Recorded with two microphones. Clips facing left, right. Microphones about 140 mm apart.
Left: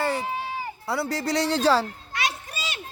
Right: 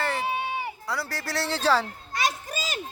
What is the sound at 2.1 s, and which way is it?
Children playing, 40° right (ahead or behind).